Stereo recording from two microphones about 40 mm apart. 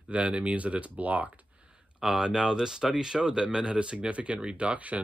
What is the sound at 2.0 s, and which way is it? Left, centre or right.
Speech, centre.